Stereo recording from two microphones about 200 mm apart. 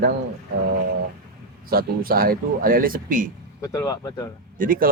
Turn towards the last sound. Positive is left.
turn(degrees=-45)  # may be behind; listen again after turning